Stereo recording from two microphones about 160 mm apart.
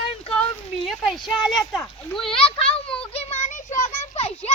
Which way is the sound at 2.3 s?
35° left (ahead or behind).